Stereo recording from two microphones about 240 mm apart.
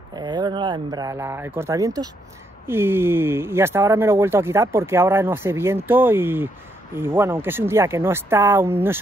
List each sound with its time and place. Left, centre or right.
0.1 s speech: centre